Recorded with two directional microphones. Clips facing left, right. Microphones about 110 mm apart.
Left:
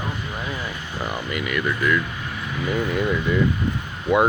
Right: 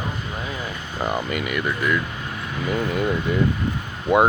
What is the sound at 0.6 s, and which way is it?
Speech, 25° right (ahead or behind).